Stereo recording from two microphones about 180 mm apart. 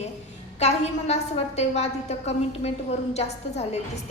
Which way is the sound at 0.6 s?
35° left (ahead or behind).